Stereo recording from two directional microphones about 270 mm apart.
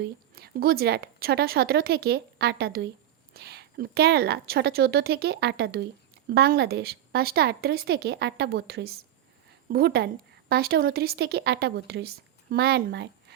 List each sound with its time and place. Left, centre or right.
0.0 s a woman's voice: right